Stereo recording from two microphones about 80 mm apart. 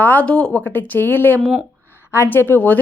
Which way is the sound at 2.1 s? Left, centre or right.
Left.